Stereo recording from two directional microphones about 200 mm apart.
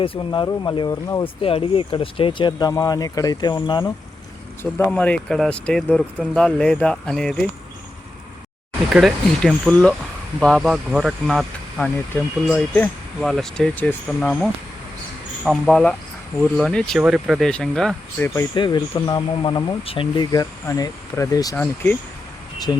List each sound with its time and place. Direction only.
0.0 s speech: 25° left (ahead or behind)
4.6 s speech: 5° left (ahead or behind)
8.9 s speech: 5° right (ahead or behind)
15.4 s speech: centre (ahead or behind)
18.5 s speech: 25° left (ahead or behind)
21.5 s speech: 5° left (ahead or behind)
22.7 s speech: 15° left (ahead or behind)